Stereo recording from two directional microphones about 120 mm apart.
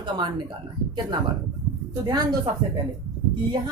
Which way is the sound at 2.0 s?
40° right (ahead or behind).